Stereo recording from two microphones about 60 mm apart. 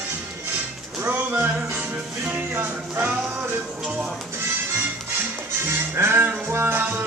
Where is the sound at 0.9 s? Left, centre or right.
Right.